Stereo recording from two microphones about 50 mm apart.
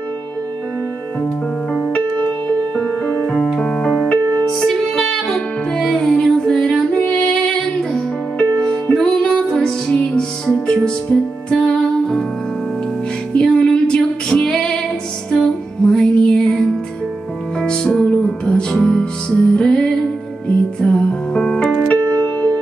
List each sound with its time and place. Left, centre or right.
2.0 s music: left
8.9 s music: centre
13.4 s female singing: centre
15.3 s music: centre